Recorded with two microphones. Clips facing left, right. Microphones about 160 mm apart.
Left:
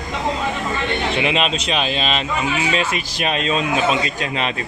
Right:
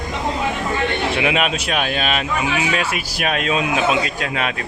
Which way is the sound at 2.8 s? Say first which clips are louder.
Left 1 dB; 10° right (ahead or behind).